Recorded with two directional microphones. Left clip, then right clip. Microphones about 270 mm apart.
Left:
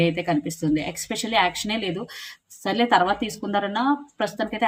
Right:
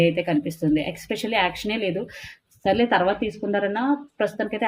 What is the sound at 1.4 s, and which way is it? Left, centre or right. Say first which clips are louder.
A woman's voice: even; centre.